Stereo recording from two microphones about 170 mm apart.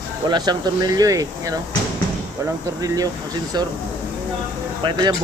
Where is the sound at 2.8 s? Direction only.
20° right (ahead or behind).